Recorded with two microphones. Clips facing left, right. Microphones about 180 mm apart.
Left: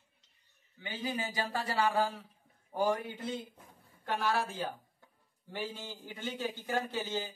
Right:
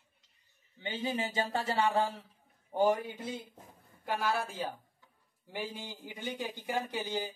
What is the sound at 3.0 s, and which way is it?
A man's voice, 10° right (ahead or behind).